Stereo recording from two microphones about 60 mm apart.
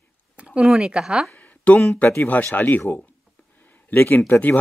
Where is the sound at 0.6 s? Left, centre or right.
Centre.